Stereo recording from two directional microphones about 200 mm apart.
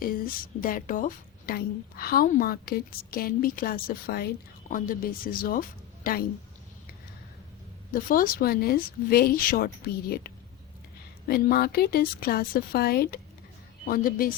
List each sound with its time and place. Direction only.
0.6 s a woman's voice: 45° left (ahead or behind)
7.9 s a woman's voice: 45° left (ahead or behind)